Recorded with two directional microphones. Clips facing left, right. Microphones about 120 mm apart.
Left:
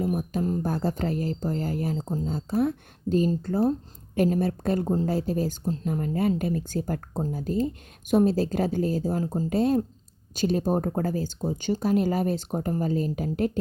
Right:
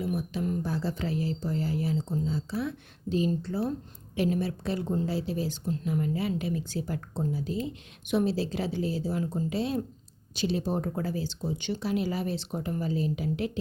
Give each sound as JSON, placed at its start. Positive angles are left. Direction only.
{"t": 0.0, "sound": "a woman's voice", "side_deg": 45}